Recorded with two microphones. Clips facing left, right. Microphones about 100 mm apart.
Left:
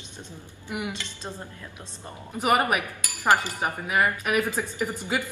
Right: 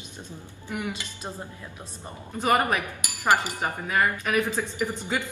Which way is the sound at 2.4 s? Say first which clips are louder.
Even; 15° left (ahead or behind).